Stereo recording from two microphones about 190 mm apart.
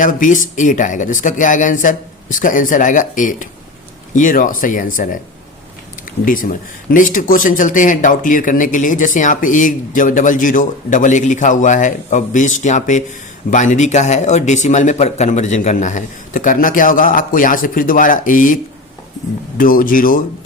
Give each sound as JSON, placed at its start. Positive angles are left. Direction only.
{"t": 0.0, "sound": "speech", "side_deg": 45}
{"t": 6.2, "sound": "speech", "side_deg": 45}